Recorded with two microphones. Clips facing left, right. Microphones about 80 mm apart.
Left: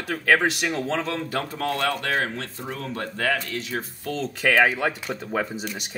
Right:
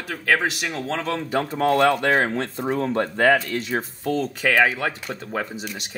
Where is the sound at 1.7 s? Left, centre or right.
Right.